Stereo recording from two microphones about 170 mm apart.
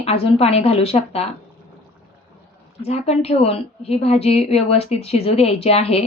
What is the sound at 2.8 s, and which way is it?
A woman's voice, 40° left (ahead or behind).